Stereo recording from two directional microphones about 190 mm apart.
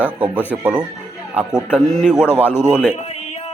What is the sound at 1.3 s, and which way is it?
Speech, 5° right (ahead or behind).